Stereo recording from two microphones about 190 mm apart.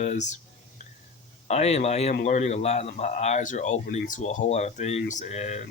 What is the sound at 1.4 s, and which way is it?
Speech, 35° left (ahead or behind).